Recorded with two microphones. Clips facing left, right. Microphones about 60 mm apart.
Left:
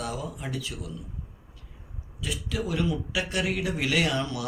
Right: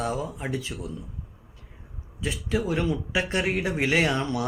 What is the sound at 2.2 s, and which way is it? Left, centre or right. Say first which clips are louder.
Speech: right 4 dB; right.